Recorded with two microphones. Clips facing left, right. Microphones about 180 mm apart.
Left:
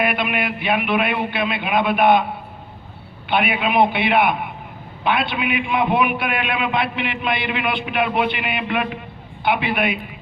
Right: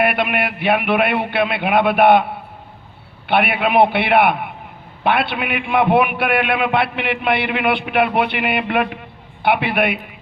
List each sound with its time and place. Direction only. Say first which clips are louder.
0.0 s a man's voice: right 3 dB; 65° right (ahead or behind)
3.2 s a man's voice: right 3 dB; 65° right (ahead or behind)